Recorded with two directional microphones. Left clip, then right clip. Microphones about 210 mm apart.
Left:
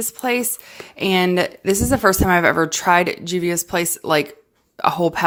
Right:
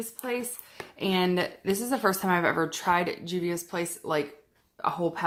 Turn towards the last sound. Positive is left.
turn(degrees=40)  # may be behind; listen again after turning